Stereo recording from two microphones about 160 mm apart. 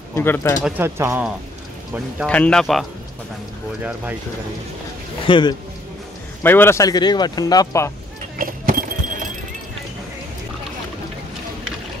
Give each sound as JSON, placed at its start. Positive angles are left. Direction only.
{"t": 0.1, "sound": "speech", "side_deg": 15}
{"t": 0.7, "sound": "speech", "side_deg": -15}
{"t": 2.2, "sound": "speech", "side_deg": 5}
{"t": 5.2, "sound": "a man's voice", "side_deg": 30}
{"t": 6.4, "sound": "speech", "side_deg": 15}
{"t": 8.4, "sound": "clip-clop", "side_deg": -60}